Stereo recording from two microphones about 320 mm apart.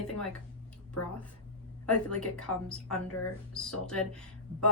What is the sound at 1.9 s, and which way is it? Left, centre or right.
Speech, centre.